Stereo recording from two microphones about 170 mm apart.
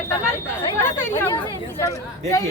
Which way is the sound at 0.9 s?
15° left (ahead or behind).